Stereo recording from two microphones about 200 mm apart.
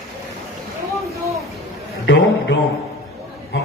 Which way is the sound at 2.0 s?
60° left (ahead or behind).